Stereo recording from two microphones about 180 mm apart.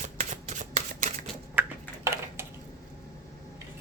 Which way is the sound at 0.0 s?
40° right (ahead or behind).